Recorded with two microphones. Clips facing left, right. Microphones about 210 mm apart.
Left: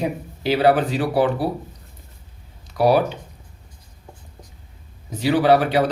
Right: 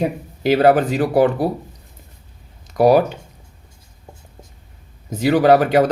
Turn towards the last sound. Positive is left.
turn(degrees=-45)  # may be behind; listen again after turning